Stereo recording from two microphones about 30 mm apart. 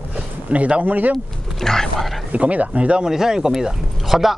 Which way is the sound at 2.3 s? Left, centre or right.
Right.